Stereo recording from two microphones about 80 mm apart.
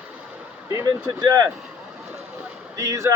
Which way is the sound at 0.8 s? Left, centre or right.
Right.